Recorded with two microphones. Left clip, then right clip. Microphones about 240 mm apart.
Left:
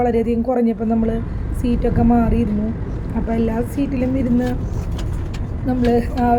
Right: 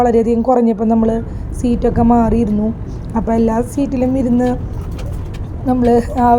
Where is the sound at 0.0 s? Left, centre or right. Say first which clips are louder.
Right 5 dB; centre.